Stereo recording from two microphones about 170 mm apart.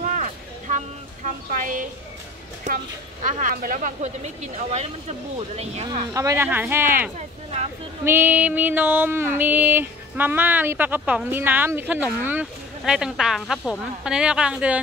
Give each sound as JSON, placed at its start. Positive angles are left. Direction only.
{"t": 0.0, "sound": "a sound", "side_deg": -50}
{"t": 2.7, "sound": "speech", "side_deg": -45}
{"t": 5.9, "sound": "speech", "side_deg": -20}